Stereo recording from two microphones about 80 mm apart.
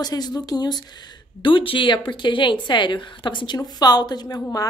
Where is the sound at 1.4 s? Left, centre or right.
Left.